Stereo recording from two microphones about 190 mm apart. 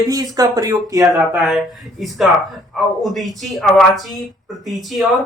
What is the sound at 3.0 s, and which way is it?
Speech, centre (ahead or behind).